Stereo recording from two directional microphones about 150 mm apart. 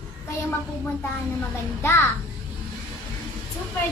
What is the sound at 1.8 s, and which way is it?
Child singing, 15° left (ahead or behind).